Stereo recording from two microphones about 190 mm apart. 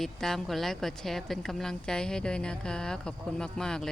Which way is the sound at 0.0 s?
Centre (ahead or behind).